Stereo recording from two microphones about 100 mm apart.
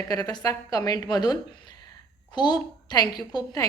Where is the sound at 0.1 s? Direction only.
40° left (ahead or behind).